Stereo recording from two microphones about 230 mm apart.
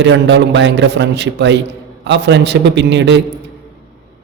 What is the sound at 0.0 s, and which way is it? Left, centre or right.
A man's voice, right.